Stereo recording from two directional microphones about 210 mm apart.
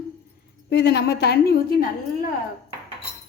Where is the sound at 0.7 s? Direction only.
50° left (ahead or behind).